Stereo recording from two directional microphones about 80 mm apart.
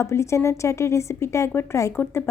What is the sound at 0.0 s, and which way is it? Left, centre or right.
A woman's voice, left.